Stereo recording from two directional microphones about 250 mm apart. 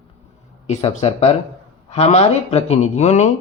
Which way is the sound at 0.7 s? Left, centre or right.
Left.